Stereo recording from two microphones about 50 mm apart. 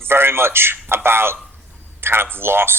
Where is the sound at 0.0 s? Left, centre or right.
Right.